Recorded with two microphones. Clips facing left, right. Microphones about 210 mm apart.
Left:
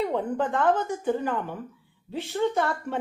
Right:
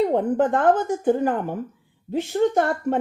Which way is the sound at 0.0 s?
45° right (ahead or behind).